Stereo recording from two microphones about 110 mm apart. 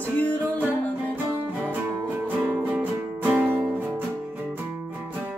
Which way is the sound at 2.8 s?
15° right (ahead or behind).